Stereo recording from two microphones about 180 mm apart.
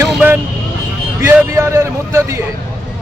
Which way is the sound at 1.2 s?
15° right (ahead or behind).